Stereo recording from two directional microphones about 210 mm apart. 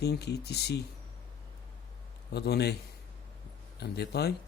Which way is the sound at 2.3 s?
50° left (ahead or behind).